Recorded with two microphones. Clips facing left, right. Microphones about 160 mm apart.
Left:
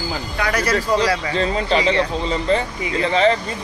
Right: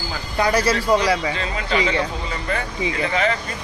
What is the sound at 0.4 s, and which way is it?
Speech, 30° right (ahead or behind).